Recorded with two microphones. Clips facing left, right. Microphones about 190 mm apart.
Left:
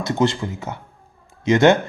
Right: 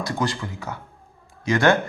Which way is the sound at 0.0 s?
25° left (ahead or behind).